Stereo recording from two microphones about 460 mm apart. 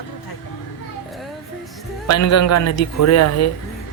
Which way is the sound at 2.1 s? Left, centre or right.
Left.